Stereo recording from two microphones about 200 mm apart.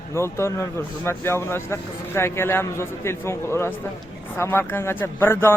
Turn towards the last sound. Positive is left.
turn(degrees=10)  # may be behind; listen again after turning